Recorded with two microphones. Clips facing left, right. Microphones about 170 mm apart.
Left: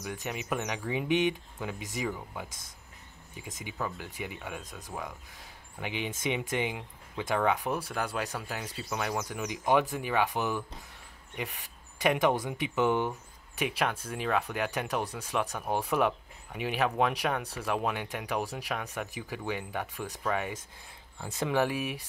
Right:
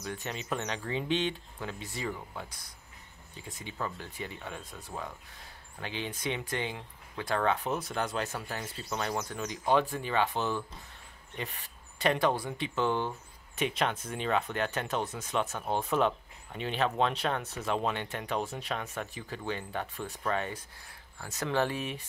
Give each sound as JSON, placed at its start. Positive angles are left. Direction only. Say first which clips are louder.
{"t": 0.0, "sound": "speech", "louder": "left 1 dB", "side_deg": 10}
{"t": 2.0, "sound": "speech", "louder": "even", "side_deg": 5}
{"t": 3.3, "sound": "speech", "louder": "left 1 dB", "side_deg": 15}
{"t": 12.0, "sound": "speech", "louder": "left 2 dB", "side_deg": 15}